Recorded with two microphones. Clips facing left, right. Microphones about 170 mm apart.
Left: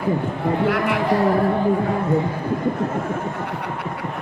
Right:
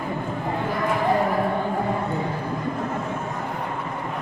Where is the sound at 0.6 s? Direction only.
80° left.